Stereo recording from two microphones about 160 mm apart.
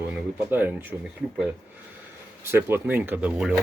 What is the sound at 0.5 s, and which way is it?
Speech, 10° right (ahead or behind).